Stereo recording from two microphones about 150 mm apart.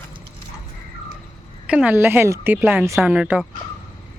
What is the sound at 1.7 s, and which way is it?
Speech, 10° right (ahead or behind).